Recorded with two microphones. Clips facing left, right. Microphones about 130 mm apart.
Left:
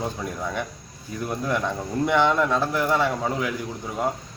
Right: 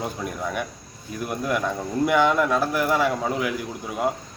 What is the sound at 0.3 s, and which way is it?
A man's voice, 15° right (ahead or behind).